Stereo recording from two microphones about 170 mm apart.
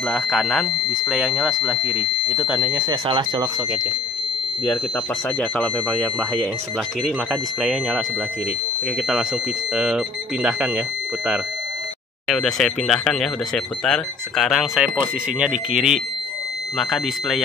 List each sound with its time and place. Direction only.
0.1 s speech: centre (ahead or behind)
2.8 s speech: 30° right (ahead or behind)
5.4 s speech: 5° left (ahead or behind)
7.6 s speech: 5° right (ahead or behind)
9.8 s speech: 5° right (ahead or behind)
12.3 s speech: centre (ahead or behind)